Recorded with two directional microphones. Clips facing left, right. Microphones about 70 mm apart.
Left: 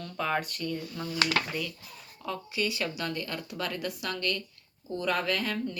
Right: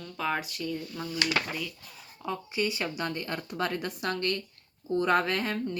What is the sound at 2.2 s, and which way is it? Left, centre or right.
Speech, right.